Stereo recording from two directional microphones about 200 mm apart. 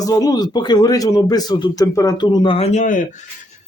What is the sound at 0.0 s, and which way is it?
Speech, 20° left (ahead or behind).